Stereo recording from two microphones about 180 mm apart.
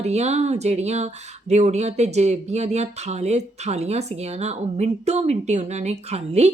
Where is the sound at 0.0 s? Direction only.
35° right (ahead or behind).